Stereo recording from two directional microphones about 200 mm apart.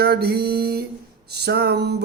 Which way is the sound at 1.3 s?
55° right (ahead or behind).